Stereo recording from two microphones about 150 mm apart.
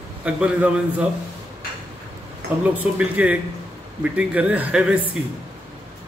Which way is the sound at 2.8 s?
10° right (ahead or behind).